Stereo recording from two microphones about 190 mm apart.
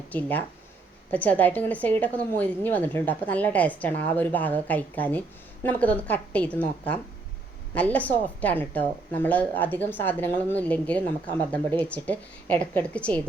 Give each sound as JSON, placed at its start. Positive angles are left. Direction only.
{"t": 0.1, "sound": "a woman's voice", "side_deg": 10}